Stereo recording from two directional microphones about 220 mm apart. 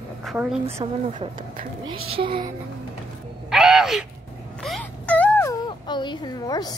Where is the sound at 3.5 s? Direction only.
Centre (ahead or behind).